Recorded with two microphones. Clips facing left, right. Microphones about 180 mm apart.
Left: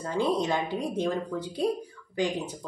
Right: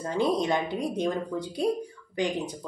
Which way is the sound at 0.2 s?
15° right (ahead or behind).